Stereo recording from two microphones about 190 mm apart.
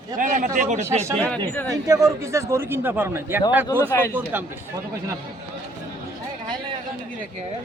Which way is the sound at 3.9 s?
15° left (ahead or behind).